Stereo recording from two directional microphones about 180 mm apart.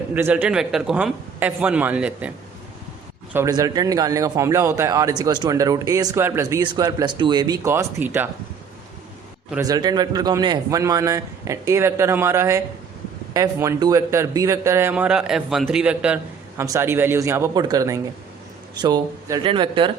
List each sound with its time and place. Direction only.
0.1 s a man's voice: 10° right (ahead or behind)
3.3 s a man's voice: 15° right (ahead or behind)
9.6 s a man's voice: 20° right (ahead or behind)